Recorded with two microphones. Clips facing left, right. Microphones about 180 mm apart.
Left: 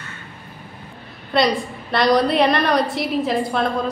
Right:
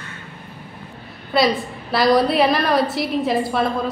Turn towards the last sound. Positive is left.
turn(degrees=0)  # may be behind; listen again after turning